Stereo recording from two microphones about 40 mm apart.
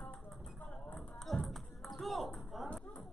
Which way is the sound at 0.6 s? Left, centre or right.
Left.